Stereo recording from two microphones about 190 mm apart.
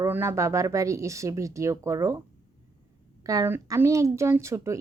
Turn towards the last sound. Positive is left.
turn(degrees=-15)  # may be behind; listen again after turning